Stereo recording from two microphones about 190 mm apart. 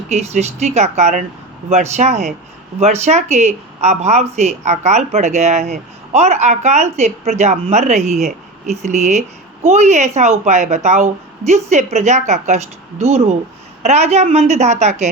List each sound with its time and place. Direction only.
0.1 s speech: 35° right (ahead or behind)